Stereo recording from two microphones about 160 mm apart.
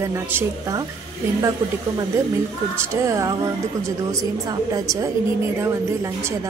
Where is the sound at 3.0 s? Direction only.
20° right (ahead or behind).